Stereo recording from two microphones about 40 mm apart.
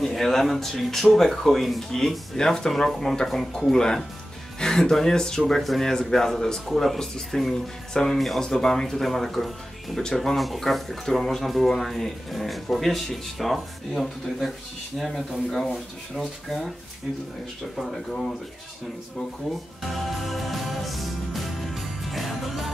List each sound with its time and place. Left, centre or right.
0.0 s speech: centre
6.7 s speech: centre
17.7 s speech: centre
19.8 s music: centre